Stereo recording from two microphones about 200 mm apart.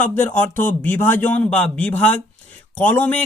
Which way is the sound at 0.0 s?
10° left (ahead or behind).